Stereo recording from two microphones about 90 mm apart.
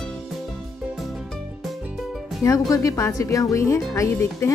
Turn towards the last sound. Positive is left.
turn(degrees=35)  # may be behind; listen again after turning